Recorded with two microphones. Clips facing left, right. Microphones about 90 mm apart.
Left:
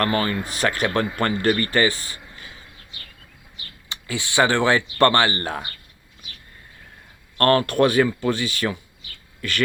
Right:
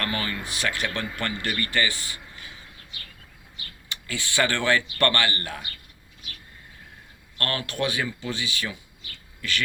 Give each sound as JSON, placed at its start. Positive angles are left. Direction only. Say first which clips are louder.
{"t": 0.0, "sound": "speech", "louder": "left 8 dB", "side_deg": 40}
{"t": 3.8, "sound": "speech", "louder": "left 4 dB", "side_deg": 20}
{"t": 7.3, "sound": "speech", "louder": "left 12 dB", "side_deg": 45}